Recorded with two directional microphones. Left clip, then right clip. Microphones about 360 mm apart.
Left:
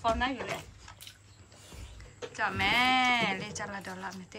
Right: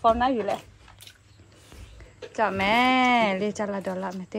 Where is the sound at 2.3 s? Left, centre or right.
Centre.